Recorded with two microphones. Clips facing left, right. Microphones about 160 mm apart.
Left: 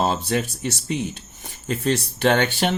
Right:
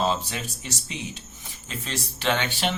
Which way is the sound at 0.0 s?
55° left (ahead or behind).